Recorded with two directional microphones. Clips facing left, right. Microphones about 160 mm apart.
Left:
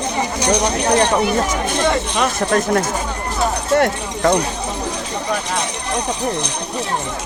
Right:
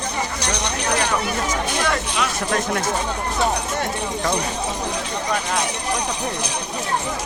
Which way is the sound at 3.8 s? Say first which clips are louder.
Left 7 dB; 65° left (ahead or behind).